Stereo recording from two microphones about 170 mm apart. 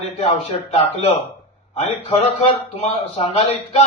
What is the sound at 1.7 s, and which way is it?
A man's voice, 35° left (ahead or behind).